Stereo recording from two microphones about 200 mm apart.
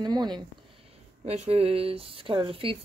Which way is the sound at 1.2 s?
30° right (ahead or behind).